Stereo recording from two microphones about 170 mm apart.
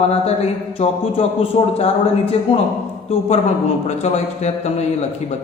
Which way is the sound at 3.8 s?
40° left (ahead or behind).